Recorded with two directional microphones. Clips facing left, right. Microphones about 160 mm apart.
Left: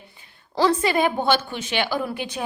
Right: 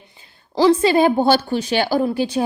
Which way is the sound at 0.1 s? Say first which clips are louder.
Right 7 dB; 25° right (ahead or behind).